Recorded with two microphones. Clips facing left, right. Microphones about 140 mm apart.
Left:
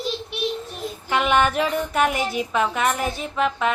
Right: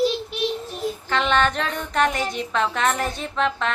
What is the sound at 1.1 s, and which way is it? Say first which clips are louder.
A woman's voice: left 2 dB; 10° left (ahead or behind).